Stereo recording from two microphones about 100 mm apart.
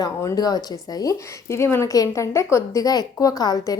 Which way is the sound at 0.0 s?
35° left (ahead or behind).